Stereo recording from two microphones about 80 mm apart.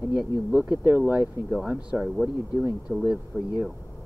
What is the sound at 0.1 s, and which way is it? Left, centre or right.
Speech, centre.